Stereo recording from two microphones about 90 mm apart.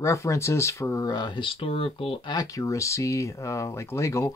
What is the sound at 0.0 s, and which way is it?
Speech, 35° left (ahead or behind).